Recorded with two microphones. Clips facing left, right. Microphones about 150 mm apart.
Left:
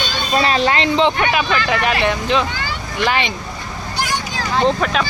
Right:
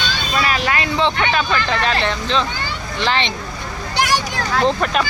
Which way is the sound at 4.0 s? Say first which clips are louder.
Right 4 dB; 70° right (ahead or behind).